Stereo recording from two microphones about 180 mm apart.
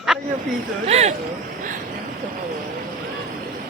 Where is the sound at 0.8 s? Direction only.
35° right (ahead or behind).